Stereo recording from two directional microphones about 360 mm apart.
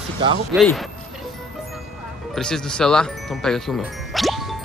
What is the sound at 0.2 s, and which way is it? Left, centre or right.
Speech, centre.